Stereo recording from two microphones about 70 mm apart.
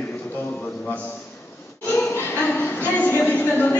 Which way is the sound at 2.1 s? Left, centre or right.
Left.